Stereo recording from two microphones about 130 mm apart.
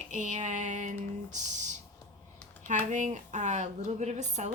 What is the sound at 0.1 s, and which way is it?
Female singing, 70° right (ahead or behind).